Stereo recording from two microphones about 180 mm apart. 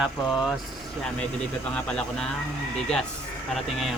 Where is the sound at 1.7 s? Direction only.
5° left (ahead or behind).